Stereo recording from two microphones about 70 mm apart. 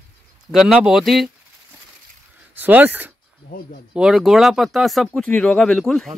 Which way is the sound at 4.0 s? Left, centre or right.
Centre.